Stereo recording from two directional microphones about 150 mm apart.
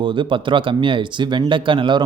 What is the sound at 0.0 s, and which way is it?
Speech, 35° right (ahead or behind).